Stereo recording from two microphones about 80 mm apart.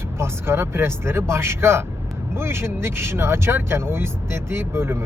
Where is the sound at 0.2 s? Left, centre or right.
Right.